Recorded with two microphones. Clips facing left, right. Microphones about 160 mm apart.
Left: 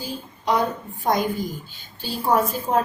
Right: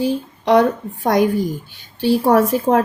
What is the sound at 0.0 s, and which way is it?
A woman's voice, 80° right.